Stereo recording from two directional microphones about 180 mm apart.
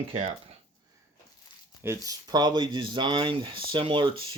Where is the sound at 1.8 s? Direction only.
15° right (ahead or behind).